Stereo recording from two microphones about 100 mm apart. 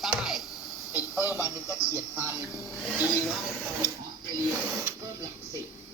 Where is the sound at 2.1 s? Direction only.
10° right (ahead or behind).